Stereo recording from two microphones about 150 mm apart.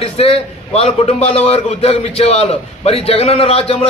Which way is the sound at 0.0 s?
40° left (ahead or behind).